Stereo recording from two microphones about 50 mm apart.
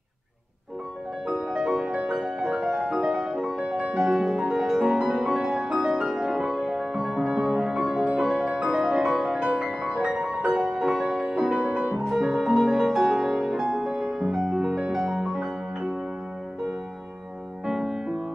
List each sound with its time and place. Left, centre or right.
1.2 s music: centre
9.4 s music: right
9.8 s music: centre
12.1 s music: centre
17.6 s music: centre